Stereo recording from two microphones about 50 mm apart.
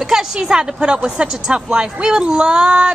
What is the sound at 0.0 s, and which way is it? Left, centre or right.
A woman's voice, centre.